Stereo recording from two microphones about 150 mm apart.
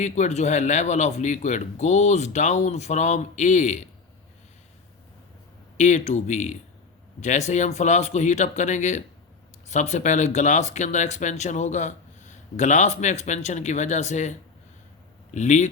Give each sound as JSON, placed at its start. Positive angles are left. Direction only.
{"t": 0.0, "sound": "speech", "side_deg": 50}
{"t": 5.7, "sound": "speech", "side_deg": 55}